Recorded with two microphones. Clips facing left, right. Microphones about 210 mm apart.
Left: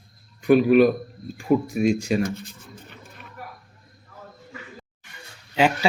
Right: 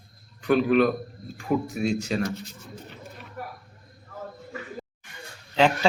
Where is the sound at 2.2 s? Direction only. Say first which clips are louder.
Left 1 dB; 55° left (ahead or behind).